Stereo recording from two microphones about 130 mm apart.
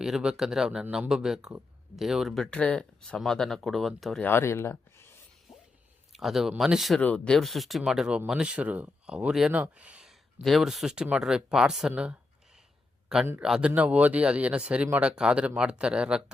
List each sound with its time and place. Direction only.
0.0 s speech: 5° right (ahead or behind)
4.2 s speech: 15° left (ahead or behind)
6.1 s speech: centre (ahead or behind)
7.0 s speech: 10° left (ahead or behind); by 12.1 s 5° right (ahead or behind)
13.4 s speech: 5° right (ahead or behind)